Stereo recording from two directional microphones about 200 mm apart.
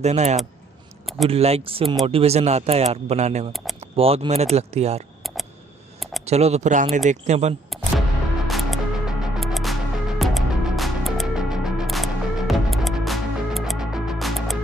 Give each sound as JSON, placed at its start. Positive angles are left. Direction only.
{"t": 0.0, "sound": "speech", "side_deg": -35}
{"t": 5.2, "sound": "a sound", "side_deg": 0}
{"t": 6.2, "sound": "speech", "side_deg": -30}
{"t": 8.5, "sound": "music", "side_deg": 0}